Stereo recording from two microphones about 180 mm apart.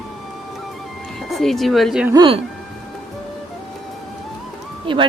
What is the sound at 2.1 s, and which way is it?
Speech, 25° right (ahead or behind).